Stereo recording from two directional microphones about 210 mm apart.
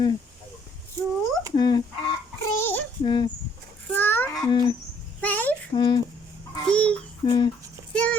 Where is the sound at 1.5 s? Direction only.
20° left (ahead or behind).